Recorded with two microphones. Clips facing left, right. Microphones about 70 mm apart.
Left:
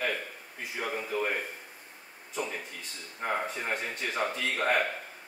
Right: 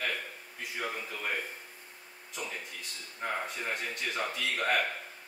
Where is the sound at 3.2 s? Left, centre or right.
Centre.